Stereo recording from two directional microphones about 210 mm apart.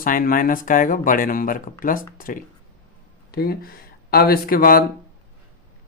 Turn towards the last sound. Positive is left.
turn(degrees=45)  # may be behind; listen again after turning